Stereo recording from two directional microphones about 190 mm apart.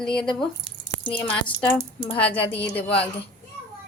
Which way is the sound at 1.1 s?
10° left (ahead or behind).